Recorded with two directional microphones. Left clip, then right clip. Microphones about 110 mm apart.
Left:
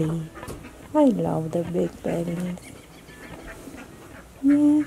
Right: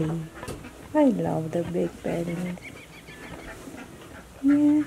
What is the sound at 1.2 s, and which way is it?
Speech, 15° left (ahead or behind).